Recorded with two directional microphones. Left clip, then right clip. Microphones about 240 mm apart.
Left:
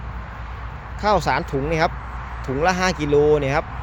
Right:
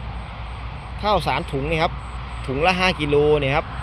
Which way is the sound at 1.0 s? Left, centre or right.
Left.